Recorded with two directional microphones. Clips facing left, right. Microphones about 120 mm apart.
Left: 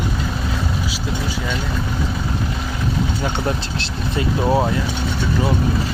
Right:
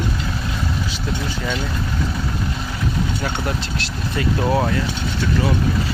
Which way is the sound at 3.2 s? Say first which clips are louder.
Left 2 dB; 25° left (ahead or behind).